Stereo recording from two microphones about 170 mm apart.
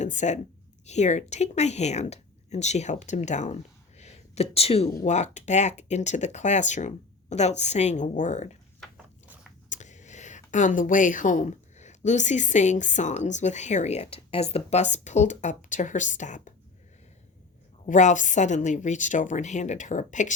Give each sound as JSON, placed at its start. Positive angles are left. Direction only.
{"t": 0.0, "sound": "a woman's voice", "side_deg": 45}
{"t": 8.8, "sound": "a sound", "side_deg": -5}
{"t": 9.6, "sound": "speech", "side_deg": 45}
{"t": 17.8, "sound": "speech", "side_deg": 45}